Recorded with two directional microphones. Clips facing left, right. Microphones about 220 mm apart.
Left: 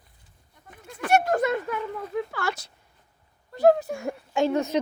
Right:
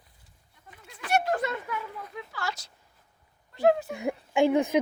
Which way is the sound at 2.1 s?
55° left (ahead or behind).